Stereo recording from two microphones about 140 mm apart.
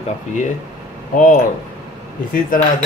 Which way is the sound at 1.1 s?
70° left (ahead or behind).